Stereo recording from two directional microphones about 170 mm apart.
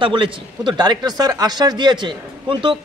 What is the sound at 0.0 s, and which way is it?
A man's voice, 30° right (ahead or behind).